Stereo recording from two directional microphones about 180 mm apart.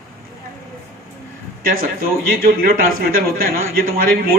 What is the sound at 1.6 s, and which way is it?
Speech, 55° right (ahead or behind).